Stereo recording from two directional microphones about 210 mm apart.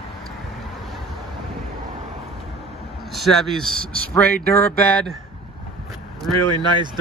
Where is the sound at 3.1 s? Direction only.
Centre (ahead or behind).